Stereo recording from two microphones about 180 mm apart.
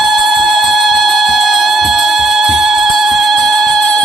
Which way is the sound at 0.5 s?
Centre (ahead or behind).